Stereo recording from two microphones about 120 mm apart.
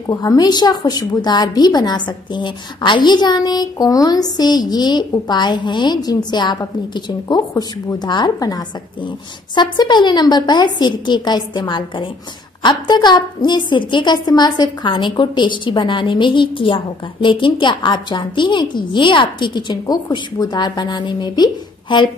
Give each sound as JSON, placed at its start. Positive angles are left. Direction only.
{"t": 0.0, "sound": "a woman's voice", "side_deg": 30}